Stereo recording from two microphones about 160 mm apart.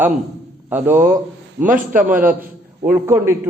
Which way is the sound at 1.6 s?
55° right (ahead or behind).